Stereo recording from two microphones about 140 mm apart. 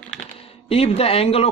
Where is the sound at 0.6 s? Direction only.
45° left (ahead or behind).